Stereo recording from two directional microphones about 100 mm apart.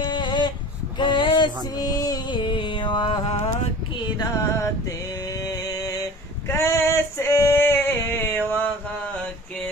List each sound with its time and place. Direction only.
0.1 s a sound: 50° left (ahead or behind)
1.8 s music: 40° left (ahead or behind)
2.3 s music: 55° left (ahead or behind)
4.2 s music: 35° left (ahead or behind)
5.4 s female singing: 35° left (ahead or behind); by 8.6 s 20° left (ahead or behind)